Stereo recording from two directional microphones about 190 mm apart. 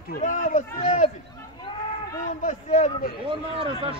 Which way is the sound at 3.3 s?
30° right (ahead or behind).